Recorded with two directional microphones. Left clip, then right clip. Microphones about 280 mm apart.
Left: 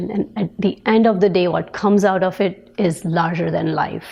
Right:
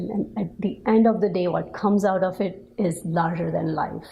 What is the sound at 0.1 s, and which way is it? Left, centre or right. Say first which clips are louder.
A woman's voice: left 5 dB; left.